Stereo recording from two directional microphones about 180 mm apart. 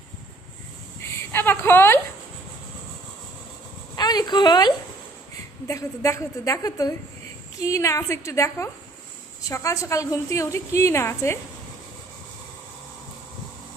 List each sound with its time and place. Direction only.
1.0 s speech: 10° left (ahead or behind)
3.9 s a woman's voice: 25° left (ahead or behind)